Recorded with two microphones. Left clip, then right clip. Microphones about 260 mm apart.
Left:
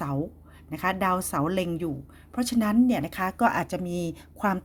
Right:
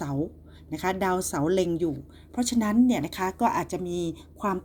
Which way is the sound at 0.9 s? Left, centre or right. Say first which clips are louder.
Left 1 dB; left.